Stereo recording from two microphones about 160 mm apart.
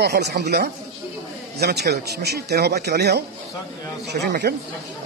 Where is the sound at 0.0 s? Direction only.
90° right.